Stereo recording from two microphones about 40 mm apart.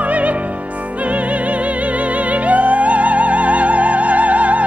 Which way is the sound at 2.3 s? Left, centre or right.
Right.